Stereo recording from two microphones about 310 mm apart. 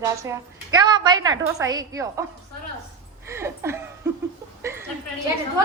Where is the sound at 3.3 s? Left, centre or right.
Centre.